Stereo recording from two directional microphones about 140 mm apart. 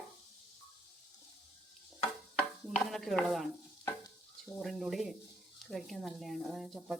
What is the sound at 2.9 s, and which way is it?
Speech, centre (ahead or behind).